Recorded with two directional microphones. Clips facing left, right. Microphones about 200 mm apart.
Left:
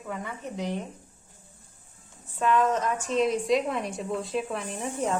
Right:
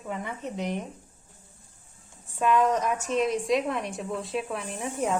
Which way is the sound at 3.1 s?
Centre (ahead or behind).